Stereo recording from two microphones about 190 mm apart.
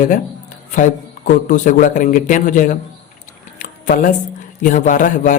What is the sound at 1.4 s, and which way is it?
A man's voice, 45° left (ahead or behind).